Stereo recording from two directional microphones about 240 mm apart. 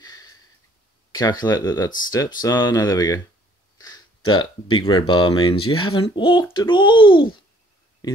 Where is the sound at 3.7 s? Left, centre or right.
Centre.